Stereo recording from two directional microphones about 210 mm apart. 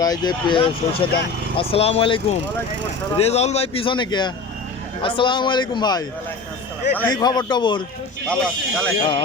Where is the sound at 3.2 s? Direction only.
30° left (ahead or behind).